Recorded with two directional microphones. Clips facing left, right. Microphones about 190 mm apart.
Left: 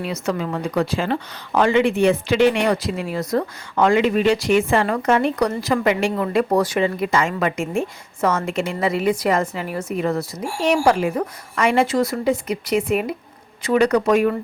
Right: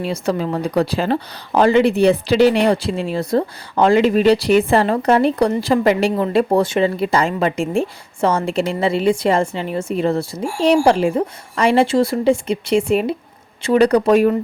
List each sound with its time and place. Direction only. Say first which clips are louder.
0.0 s speech: right 3 dB; 30° right (ahead or behind)